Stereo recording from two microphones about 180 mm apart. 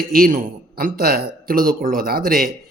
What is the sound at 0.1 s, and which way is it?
A man's voice, 50° right (ahead or behind).